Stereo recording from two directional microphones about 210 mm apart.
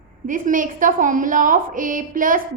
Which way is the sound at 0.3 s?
40° right (ahead or behind).